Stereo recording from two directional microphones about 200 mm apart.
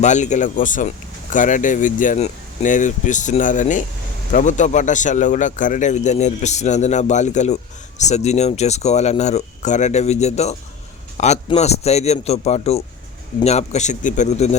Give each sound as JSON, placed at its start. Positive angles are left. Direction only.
{"t": 0.0, "sound": "speech", "side_deg": 35}